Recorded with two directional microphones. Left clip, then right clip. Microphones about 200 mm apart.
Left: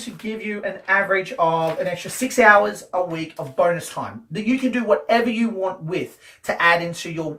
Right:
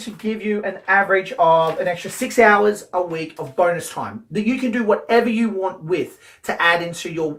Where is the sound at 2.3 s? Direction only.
20° right (ahead or behind).